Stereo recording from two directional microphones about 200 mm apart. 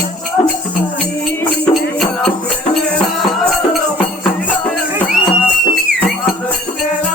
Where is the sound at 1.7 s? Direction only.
Centre (ahead or behind).